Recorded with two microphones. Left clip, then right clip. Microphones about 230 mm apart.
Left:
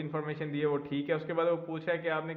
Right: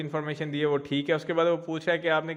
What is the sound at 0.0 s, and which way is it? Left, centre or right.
A man's voice, right.